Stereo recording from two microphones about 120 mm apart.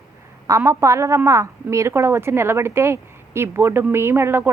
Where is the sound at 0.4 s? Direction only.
25° right (ahead or behind).